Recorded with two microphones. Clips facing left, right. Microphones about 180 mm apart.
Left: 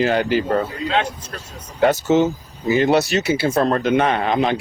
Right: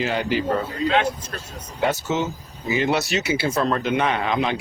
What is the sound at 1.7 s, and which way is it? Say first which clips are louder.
Speech: left 7 dB; 40° left (ahead or behind).